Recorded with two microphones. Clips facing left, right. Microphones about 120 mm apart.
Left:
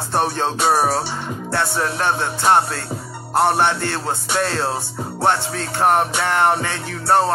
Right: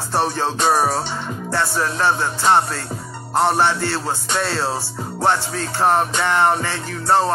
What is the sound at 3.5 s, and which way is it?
Music, 55° left (ahead or behind).